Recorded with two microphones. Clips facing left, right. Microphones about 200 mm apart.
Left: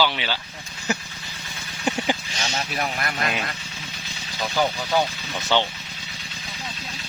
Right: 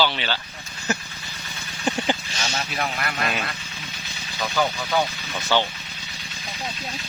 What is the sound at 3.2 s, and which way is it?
Speech, 15° left (ahead or behind).